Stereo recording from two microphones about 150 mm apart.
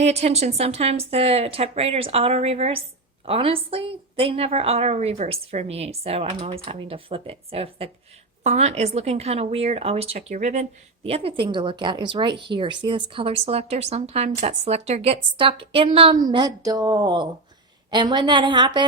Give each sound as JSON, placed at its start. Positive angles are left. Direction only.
{"t": 0.0, "sound": "a woman's voice", "side_deg": -45}